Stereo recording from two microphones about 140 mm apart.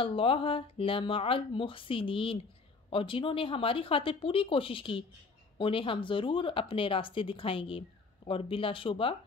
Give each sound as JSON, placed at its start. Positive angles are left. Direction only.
{"t": 0.0, "sound": "speech", "side_deg": 40}